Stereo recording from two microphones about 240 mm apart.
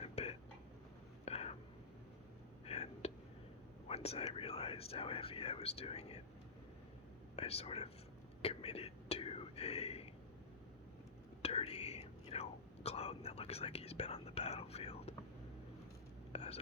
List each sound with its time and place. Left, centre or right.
0.0 s whispering: left
2.6 s whispering: left
3.8 s speech: left
7.3 s speech: left
8.4 s whispering: left
11.4 s whispering: left
16.3 s whispering: left